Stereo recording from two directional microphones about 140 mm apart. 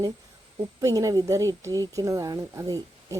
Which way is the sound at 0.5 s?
25° right (ahead or behind).